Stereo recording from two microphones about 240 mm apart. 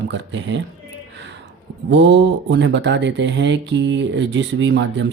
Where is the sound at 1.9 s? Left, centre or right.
Right.